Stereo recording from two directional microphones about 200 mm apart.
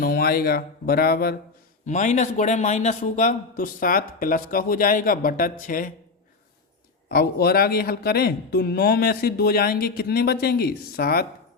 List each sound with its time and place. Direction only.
0.0 s speech: 50° left (ahead or behind)
1.9 s a man's voice: 35° left (ahead or behind)
7.1 s speech: 50° left (ahead or behind)